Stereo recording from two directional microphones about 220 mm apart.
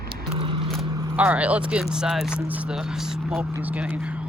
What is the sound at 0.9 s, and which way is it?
Speech, 10° right (ahead or behind).